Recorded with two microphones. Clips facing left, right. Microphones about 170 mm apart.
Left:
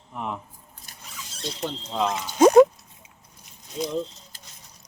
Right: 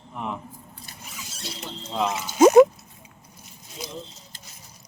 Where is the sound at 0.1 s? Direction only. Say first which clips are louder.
Even; 5° left (ahead or behind).